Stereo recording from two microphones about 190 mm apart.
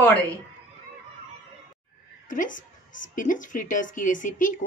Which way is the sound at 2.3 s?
45° left (ahead or behind).